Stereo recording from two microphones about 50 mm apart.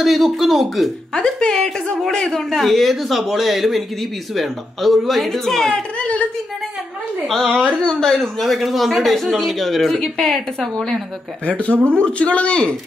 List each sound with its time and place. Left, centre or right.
0.0 s speech: centre
1.1 s a woman's voice: centre
5.7 s a woman's voice: left
7.2 s a woman's voice: centre
8.2 s a woman's voice: centre
11.4 s speech: left